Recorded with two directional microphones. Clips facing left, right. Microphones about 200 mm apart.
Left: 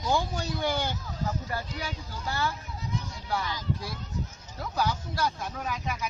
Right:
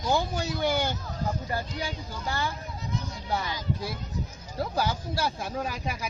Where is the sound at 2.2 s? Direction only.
15° right (ahead or behind).